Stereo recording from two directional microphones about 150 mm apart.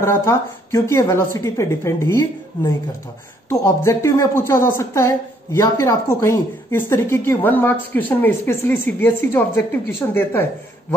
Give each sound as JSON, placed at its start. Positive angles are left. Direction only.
{"t": 0.0, "sound": "a woman's voice", "side_deg": 20}